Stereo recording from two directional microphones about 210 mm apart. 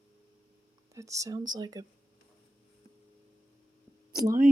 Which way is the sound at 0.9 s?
15° right (ahead or behind).